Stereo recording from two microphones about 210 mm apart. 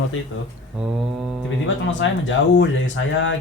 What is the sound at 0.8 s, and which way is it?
Mantra, 5° right (ahead or behind).